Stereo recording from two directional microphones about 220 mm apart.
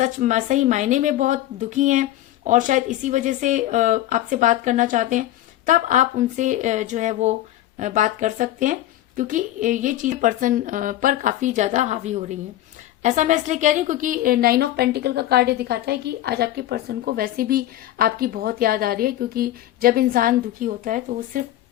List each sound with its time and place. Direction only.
0.0 s a woman's voice: 35° right (ahead or behind)